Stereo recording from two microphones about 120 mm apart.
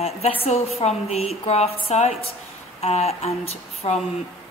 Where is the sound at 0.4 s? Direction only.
55° left (ahead or behind).